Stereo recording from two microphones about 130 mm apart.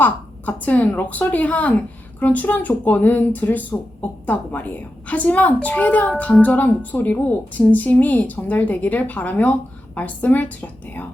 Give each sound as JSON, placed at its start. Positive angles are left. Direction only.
{"t": 0.0, "sound": "a woman's voice", "side_deg": 10}